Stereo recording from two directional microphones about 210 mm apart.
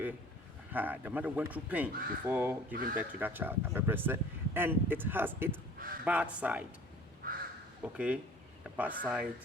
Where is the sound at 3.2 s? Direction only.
10° right (ahead or behind).